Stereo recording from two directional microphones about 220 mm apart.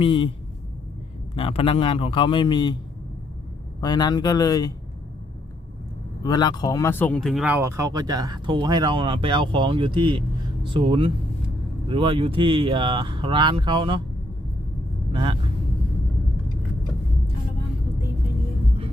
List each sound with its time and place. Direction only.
0.0 s a man's voice: 25° left (ahead or behind)
1.4 s a man's voice: 25° left (ahead or behind)
3.8 s speech: 20° left (ahead or behind)
6.2 s speech: 20° left (ahead or behind); by 14.0 s 20° right (ahead or behind)
15.1 s vehicle: 20° right (ahead or behind)